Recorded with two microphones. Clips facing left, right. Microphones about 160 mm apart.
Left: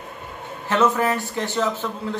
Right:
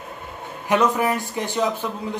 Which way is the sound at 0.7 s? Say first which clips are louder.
Even; 15° right (ahead or behind).